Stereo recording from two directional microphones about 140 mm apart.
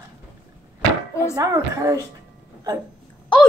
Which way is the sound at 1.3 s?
25° right (ahead or behind).